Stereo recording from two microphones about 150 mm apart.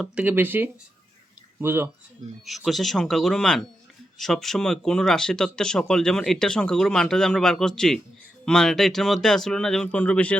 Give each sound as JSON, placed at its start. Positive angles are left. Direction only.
{"t": 0.0, "sound": "speech", "side_deg": -10}
{"t": 2.4, "sound": "speech", "side_deg": 0}